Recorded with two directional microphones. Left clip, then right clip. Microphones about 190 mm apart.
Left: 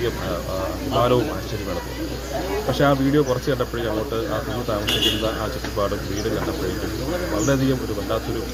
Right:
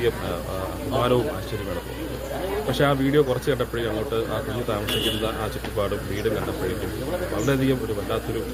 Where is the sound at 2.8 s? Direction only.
20° right (ahead or behind).